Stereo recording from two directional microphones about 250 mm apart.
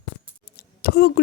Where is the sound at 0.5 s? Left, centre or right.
Left.